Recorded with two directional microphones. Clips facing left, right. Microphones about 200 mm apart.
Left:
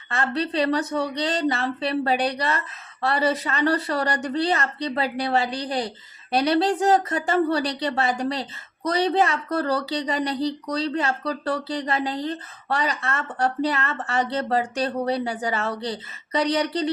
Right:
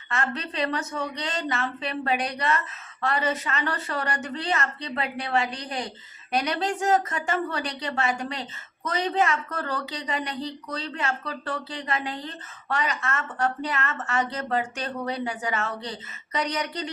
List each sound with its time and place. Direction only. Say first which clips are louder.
0.1 s a woman's voice: left 5 dB; 35° left (ahead or behind)